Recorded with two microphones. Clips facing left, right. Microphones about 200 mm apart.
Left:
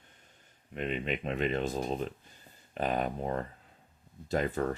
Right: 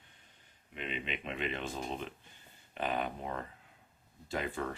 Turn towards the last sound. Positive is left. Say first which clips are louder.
# left 6 dB
turn(degrees=40)  # may be behind; listen again after turning